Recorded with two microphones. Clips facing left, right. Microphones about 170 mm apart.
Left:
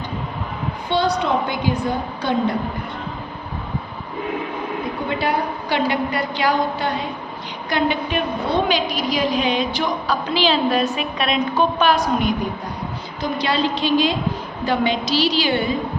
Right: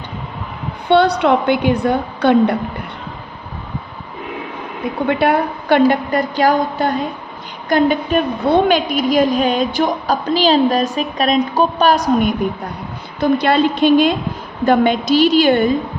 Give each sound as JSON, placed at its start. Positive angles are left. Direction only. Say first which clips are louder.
{"t": 0.9, "sound": "a woman's voice", "louder": "right 7 dB", "side_deg": -65}
{"t": 5.0, "sound": "a woman's voice", "louder": "right 7 dB", "side_deg": -60}
{"t": 13.1, "sound": "a woman's voice", "louder": "right 8 dB", "side_deg": -55}